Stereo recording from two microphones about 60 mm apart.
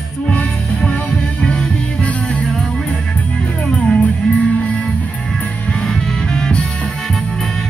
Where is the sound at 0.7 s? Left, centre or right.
Centre.